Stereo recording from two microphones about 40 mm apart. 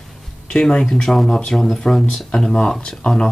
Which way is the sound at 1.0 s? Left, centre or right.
Centre.